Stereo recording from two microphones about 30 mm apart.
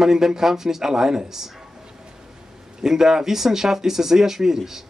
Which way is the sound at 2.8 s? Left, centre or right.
Centre.